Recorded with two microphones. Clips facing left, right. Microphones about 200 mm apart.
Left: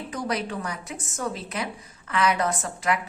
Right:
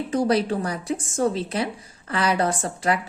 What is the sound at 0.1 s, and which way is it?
A woman's voice, 30° right (ahead or behind).